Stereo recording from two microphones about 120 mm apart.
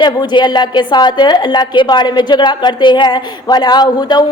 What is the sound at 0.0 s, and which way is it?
A woman's voice, 40° left (ahead or behind).